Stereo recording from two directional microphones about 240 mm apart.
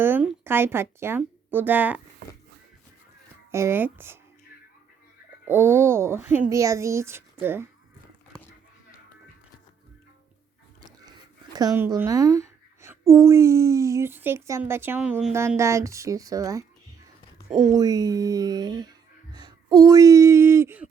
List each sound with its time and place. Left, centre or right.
0.0 s speech: centre
3.5 s speech: centre
5.5 s speech: centre
11.5 s speech: centre
17.7 s speech: centre